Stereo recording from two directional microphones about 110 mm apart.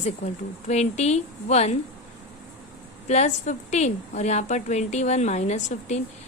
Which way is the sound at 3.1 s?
90° left.